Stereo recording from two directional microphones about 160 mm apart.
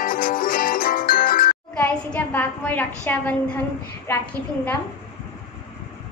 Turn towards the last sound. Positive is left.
turn(degrees=10)  # may be behind; listen again after turning